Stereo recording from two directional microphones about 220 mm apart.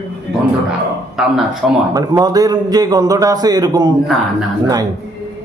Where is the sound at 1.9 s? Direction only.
15° right (ahead or behind).